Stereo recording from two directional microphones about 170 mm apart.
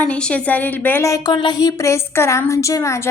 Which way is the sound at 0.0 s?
5° left (ahead or behind).